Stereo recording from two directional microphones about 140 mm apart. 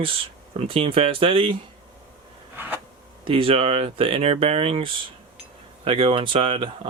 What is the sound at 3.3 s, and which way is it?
Speech, 40° right (ahead or behind).